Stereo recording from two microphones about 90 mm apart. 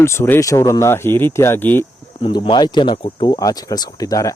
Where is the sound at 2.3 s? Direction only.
55° left (ahead or behind).